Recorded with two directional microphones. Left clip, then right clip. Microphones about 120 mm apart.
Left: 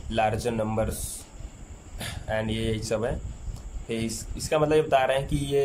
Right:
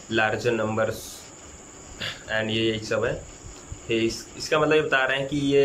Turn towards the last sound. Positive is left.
turn(degrees=40)  # may be behind; listen again after turning